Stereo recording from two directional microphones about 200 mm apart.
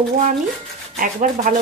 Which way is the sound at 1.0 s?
40° right (ahead or behind).